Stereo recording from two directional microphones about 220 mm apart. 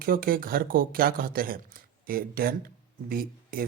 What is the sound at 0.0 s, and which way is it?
Speech, 40° right (ahead or behind).